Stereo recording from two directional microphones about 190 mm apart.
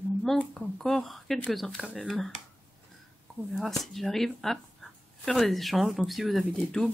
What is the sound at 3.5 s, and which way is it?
Speech, centre (ahead or behind).